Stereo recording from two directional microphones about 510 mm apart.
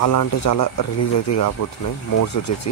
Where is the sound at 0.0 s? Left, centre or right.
Left.